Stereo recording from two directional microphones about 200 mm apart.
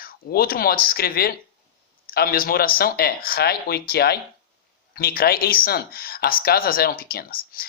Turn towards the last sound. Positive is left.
turn(degrees=50)  # may be behind; listen again after turning